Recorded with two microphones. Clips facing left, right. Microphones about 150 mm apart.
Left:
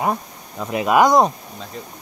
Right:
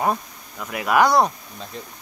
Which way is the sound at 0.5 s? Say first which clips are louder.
Left 3 dB; 25° left (ahead or behind).